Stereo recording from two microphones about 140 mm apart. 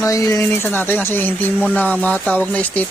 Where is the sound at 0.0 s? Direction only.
25° left (ahead or behind).